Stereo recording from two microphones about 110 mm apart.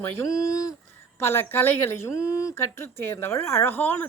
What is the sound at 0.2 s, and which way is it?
Speech, 30° left (ahead or behind).